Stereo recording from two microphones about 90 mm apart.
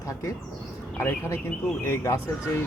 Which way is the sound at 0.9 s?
25° left (ahead or behind).